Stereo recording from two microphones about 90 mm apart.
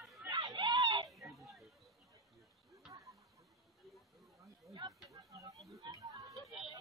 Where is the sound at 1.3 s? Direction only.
Centre (ahead or behind).